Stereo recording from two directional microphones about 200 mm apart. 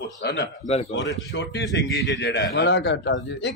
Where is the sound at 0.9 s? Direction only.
70° left (ahead or behind).